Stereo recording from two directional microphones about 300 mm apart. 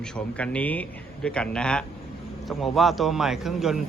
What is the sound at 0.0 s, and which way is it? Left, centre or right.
A man's voice, centre.